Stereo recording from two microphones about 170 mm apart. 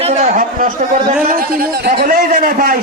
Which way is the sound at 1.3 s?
55° right (ahead or behind).